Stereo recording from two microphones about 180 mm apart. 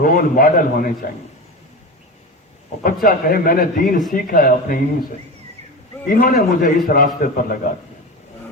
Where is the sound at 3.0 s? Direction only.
50° left (ahead or behind).